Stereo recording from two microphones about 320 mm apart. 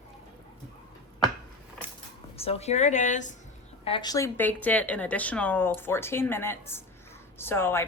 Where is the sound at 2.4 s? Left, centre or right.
Centre.